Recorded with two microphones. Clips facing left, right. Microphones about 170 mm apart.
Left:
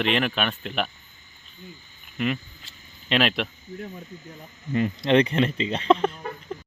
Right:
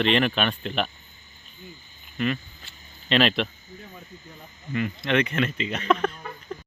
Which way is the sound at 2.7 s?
35° left (ahead or behind).